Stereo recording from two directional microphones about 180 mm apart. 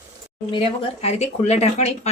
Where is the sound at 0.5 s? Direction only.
35° left (ahead or behind).